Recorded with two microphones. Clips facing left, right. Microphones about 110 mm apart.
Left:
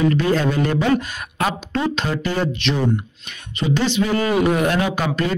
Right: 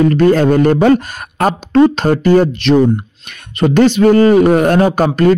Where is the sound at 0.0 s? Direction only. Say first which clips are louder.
Right 8 dB; 50° right (ahead or behind).